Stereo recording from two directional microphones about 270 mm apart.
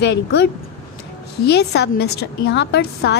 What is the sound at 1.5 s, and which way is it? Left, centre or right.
A woman's voice, left.